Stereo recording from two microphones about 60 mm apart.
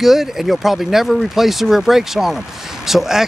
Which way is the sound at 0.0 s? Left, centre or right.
Centre.